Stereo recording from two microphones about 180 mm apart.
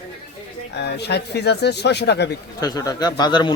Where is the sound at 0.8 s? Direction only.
65° left (ahead or behind).